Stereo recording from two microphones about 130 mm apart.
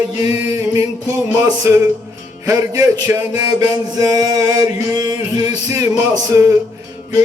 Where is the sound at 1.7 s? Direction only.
25° right (ahead or behind).